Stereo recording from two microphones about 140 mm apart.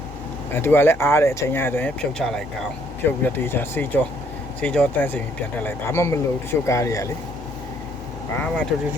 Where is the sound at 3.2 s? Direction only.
15° left (ahead or behind).